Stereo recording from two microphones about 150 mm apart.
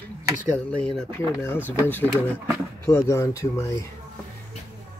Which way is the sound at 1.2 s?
15° left (ahead or behind).